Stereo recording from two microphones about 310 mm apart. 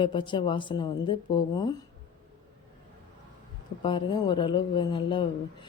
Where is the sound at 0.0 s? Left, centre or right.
Centre.